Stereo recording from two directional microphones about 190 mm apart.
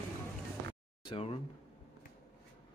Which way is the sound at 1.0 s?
30° left (ahead or behind).